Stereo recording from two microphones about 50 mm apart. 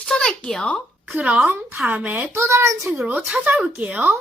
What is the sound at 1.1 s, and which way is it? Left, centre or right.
Speech, right.